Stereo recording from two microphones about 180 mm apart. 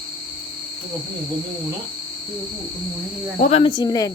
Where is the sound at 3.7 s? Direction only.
20° left (ahead or behind).